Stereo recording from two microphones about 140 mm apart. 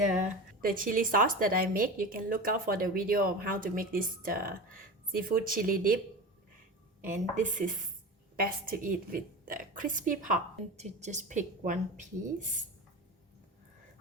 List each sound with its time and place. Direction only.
0.0 s a woman's voice: 70° right (ahead or behind); by 5.8 s 90° right
7.0 s a woman's voice: 65° right (ahead or behind)
8.4 s a woman's voice: 90° right
10.8 s speech: 55° right (ahead or behind)